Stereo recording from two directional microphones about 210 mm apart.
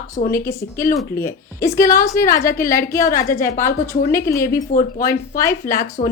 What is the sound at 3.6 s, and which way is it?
A woman's voice, 15° left (ahead or behind).